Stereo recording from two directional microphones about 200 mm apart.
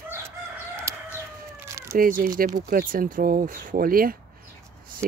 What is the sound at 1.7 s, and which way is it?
Cat, 15° right (ahead or behind).